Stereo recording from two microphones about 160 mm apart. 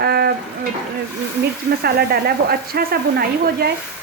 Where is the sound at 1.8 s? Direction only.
75° right (ahead or behind).